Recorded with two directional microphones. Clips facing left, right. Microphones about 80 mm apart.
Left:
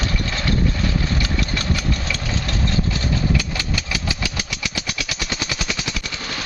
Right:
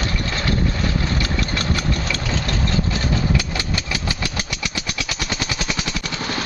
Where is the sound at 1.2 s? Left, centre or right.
Centre.